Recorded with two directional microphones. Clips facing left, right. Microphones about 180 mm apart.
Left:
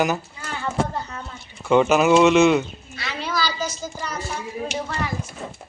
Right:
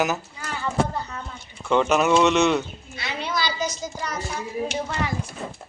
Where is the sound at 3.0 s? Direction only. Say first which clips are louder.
Left 1 dB; 20° right (ahead or behind).